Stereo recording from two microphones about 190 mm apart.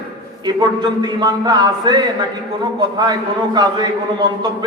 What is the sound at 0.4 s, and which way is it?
A man's voice, 20° right (ahead or behind).